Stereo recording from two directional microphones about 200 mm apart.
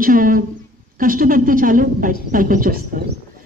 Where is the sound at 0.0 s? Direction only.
45° right (ahead or behind).